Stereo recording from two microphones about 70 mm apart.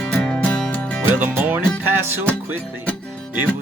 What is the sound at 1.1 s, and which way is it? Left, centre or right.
Speech, right.